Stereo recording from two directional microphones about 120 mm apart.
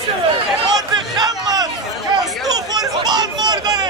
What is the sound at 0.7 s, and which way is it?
Crowd, 35° right (ahead or behind).